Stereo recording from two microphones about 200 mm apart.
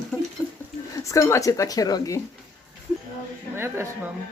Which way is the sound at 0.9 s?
15° left (ahead or behind).